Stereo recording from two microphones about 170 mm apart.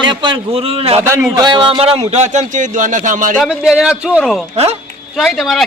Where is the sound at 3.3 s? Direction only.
Centre (ahead or behind).